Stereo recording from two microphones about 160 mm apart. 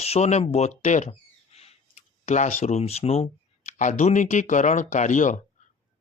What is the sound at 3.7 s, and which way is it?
Speech, 50° left (ahead or behind).